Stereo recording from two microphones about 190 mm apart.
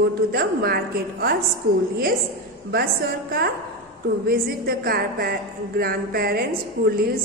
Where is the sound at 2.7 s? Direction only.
55° right (ahead or behind).